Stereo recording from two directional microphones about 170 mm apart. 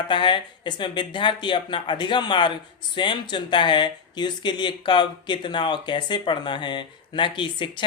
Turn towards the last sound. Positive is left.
turn(degrees=30)  # may be behind; listen again after turning